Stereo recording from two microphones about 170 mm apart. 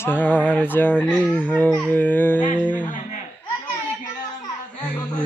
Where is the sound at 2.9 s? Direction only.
50° left (ahead or behind).